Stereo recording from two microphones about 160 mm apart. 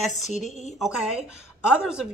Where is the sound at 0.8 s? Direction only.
5° right (ahead or behind).